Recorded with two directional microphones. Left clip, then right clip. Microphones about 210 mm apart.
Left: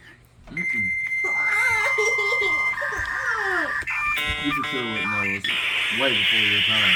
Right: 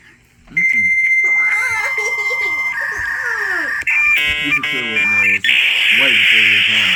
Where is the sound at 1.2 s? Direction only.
5° left (ahead or behind).